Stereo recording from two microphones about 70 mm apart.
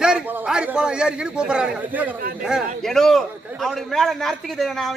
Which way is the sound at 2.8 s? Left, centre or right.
Centre.